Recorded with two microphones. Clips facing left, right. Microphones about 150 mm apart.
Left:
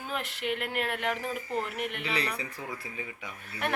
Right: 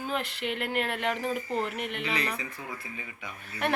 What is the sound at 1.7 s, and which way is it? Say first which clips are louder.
Speech: right 1 dB; 10° left (ahead or behind).